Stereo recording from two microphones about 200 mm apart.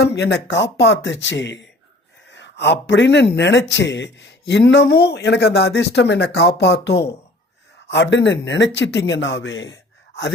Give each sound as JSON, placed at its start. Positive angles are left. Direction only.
{"t": 0.0, "sound": "speech", "side_deg": 55}